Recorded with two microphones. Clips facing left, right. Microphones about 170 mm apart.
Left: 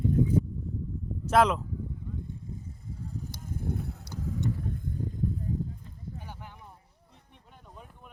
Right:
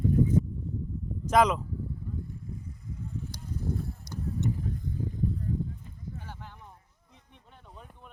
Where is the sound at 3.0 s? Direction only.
35° left (ahead or behind); by 3.9 s 65° left (ahead or behind).